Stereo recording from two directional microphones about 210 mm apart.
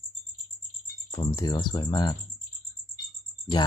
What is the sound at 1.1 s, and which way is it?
Speech, 20° left (ahead or behind).